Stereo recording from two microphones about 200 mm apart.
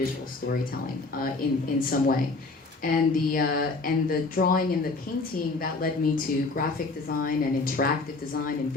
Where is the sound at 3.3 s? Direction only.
45° left (ahead or behind).